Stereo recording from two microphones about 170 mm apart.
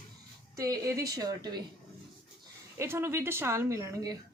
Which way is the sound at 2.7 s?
15° right (ahead or behind).